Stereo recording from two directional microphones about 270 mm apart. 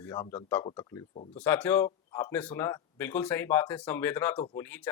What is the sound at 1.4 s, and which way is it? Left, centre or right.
Speech, centre.